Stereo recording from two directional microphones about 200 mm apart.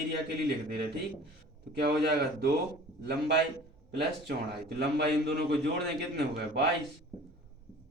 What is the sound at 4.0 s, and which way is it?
A man's voice, 55° right (ahead or behind).